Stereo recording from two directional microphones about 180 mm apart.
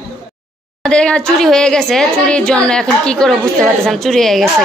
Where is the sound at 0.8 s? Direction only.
5° left (ahead or behind).